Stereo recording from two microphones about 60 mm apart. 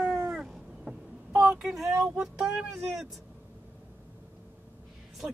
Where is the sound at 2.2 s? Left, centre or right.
Centre.